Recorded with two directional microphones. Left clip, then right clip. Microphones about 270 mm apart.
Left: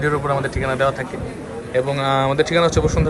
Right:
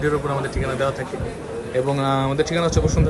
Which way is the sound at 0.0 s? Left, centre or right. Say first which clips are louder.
Left 2 dB; centre.